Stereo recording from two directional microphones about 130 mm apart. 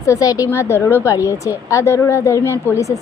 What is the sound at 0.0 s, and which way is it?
Speech, 25° left (ahead or behind).